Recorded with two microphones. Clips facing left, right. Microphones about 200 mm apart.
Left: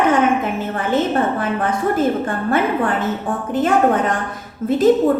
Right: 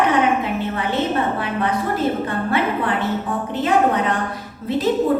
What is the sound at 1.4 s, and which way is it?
A woman's voice, 45° left (ahead or behind).